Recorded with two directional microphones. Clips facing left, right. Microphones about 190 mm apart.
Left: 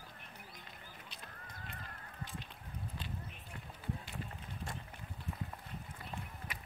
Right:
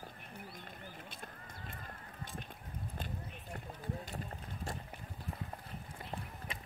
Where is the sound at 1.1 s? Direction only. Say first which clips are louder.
Right 3 dB; 45° right (ahead or behind).